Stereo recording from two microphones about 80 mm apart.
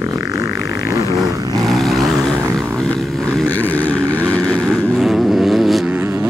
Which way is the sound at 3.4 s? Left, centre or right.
Left.